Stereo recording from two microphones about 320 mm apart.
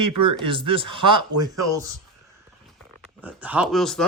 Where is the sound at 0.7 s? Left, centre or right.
Centre.